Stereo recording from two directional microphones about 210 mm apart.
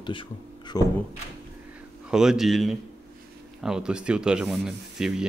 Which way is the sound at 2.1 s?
5° right (ahead or behind).